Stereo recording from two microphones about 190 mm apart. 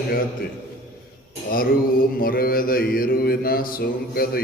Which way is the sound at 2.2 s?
50° left (ahead or behind).